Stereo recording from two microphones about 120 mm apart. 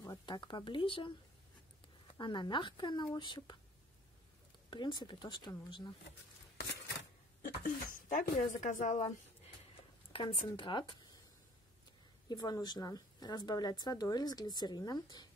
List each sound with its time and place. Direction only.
0.3 s speech: 40° left (ahead or behind)
2.1 s speech: 40° left (ahead or behind)
4.6 s speech: 40° left (ahead or behind)
7.6 s speech: 90° left
10.1 s speech: 45° left (ahead or behind)
12.3 s speech: 35° left (ahead or behind)